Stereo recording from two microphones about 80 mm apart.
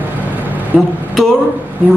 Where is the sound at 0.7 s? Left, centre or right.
Centre.